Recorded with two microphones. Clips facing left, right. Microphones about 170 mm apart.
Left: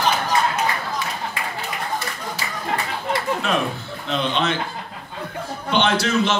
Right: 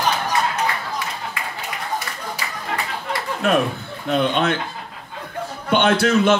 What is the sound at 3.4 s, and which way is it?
Speech, 55° right (ahead or behind).